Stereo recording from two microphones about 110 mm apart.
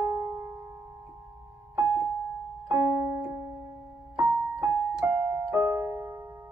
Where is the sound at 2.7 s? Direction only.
25° right (ahead or behind).